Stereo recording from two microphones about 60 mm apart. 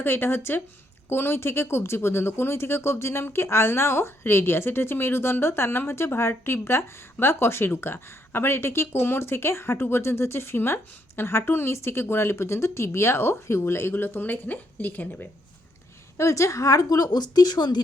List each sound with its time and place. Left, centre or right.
0.0 s speech: left
16.1 s a woman's voice: left